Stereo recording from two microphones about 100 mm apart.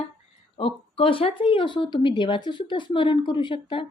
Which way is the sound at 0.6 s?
70° left (ahead or behind).